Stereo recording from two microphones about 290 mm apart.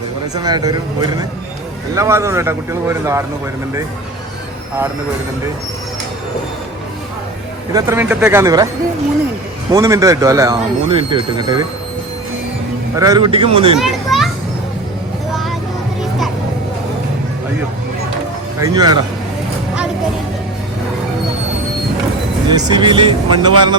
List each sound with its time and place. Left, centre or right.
0.3 s speech: centre
2.0 s speech: centre
7.7 s speech: centre
9.7 s speech: centre
13.0 s speech: centre
13.7 s children playing: centre
18.6 s speech: centre
22.4 s speech: centre